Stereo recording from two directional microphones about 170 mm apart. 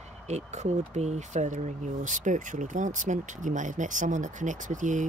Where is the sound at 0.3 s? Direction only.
40° right (ahead or behind).